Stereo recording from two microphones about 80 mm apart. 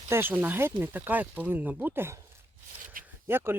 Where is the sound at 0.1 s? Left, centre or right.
Right.